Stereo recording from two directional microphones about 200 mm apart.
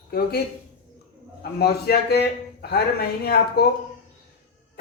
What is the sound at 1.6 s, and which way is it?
A man's voice, 50° left (ahead or behind).